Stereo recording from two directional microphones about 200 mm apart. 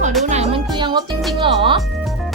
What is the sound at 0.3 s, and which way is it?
Music, 30° right (ahead or behind).